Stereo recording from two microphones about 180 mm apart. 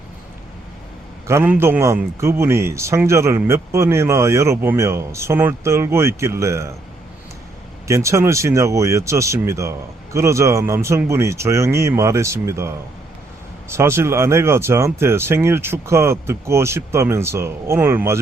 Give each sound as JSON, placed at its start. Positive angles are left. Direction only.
{"t": 1.3, "sound": "a man's voice", "side_deg": -15}
{"t": 7.9, "sound": "a man's voice", "side_deg": -15}